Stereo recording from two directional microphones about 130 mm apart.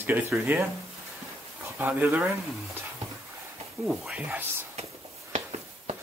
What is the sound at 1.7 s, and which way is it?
Speech, 15° right (ahead or behind).